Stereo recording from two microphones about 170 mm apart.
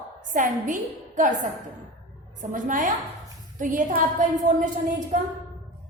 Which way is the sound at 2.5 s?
50° right (ahead or behind).